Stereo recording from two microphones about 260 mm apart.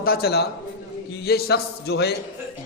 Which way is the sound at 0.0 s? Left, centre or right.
Left.